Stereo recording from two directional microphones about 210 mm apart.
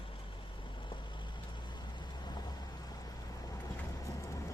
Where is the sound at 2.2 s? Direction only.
20° left (ahead or behind).